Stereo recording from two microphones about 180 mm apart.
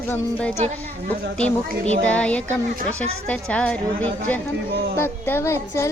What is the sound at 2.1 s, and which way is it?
Music, 5° left (ahead or behind).